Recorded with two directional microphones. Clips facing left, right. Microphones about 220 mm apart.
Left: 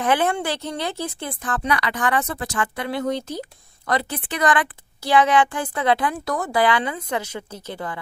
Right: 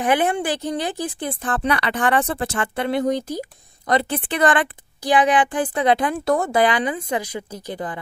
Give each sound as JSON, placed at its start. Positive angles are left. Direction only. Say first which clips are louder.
{"t": 0.0, "sound": "speech", "louder": "right 1 dB", "side_deg": -15}
{"t": 1.4, "sound": "a woman's voice", "louder": "right 2 dB", "side_deg": -30}
{"t": 3.9, "sound": "a woman's voice", "louder": "right 4 dB", "side_deg": -25}
{"t": 5.0, "sound": "a woman's voice", "louder": "even", "side_deg": -15}